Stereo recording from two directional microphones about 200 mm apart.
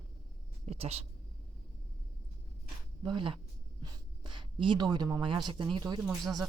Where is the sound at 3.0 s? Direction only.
25° right (ahead or behind).